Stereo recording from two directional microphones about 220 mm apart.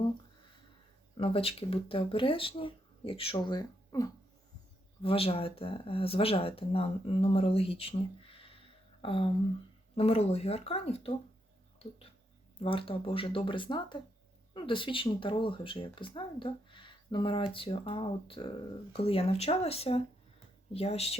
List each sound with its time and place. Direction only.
1.1 s speech: 25° left (ahead or behind)
5.0 s speech: 25° left (ahead or behind)